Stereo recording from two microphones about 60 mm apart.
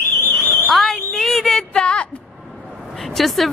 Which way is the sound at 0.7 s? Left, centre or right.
Centre.